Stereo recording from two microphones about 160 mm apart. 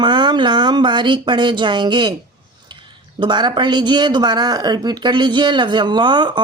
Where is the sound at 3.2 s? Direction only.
30° right (ahead or behind).